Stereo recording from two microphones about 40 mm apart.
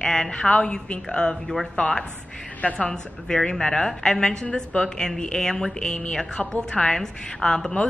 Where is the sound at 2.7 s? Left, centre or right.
Centre.